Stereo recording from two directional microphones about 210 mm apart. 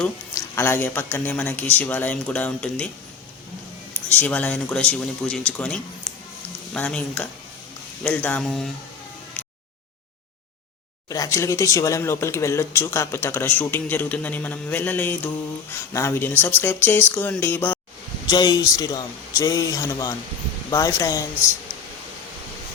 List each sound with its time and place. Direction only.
0.0 s speech: 10° left (ahead or behind)
4.1 s speech: 10° left (ahead or behind)
11.1 s speech: 15° left (ahead or behind)